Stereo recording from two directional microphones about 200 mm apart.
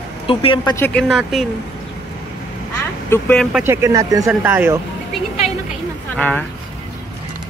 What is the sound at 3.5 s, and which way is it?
Speech, 10° right (ahead or behind).